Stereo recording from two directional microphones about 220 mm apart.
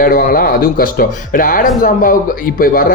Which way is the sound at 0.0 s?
40° left (ahead or behind).